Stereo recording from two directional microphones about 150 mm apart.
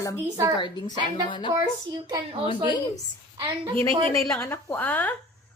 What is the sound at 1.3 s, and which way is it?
Speech, 35° left (ahead or behind).